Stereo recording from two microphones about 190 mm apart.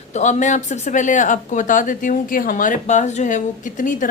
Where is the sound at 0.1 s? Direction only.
40° left (ahead or behind).